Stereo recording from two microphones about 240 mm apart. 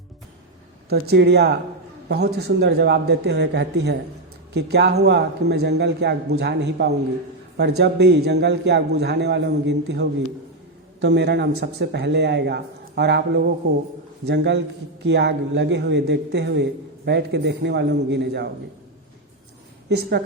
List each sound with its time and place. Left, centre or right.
0.9 s a man's voice: right
19.9 s a man's voice: right